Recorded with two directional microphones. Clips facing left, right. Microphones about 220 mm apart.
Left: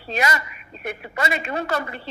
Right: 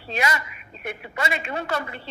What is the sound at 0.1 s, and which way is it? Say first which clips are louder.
A woman's voice: left 2 dB; 40° left (ahead or behind).